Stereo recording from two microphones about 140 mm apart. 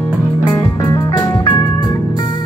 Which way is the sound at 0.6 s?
30° left (ahead or behind).